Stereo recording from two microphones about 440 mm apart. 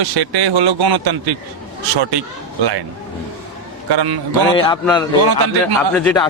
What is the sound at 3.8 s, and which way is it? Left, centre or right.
Speech, right.